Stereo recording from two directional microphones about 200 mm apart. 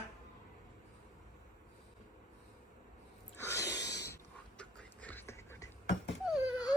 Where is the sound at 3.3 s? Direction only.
15° left (ahead or behind).